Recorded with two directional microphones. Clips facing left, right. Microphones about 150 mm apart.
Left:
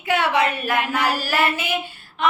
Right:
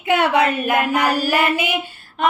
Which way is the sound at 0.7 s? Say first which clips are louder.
Right 4 dB; 45° right (ahead or behind).